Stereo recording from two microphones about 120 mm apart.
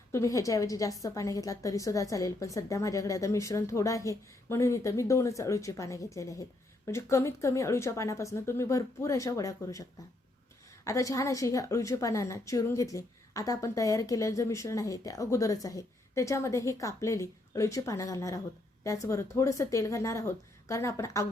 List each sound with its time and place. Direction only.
0.1 s a woman's voice: 25° left (ahead or behind)
10.8 s a woman's voice: 25° left (ahead or behind)